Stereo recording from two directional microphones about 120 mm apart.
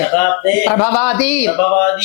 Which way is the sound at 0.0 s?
20° left (ahead or behind).